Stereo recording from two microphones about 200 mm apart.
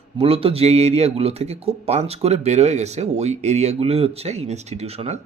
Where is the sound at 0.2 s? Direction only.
30° right (ahead or behind).